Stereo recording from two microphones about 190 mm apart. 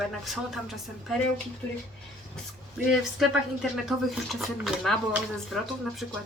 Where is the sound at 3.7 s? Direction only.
Centre (ahead or behind).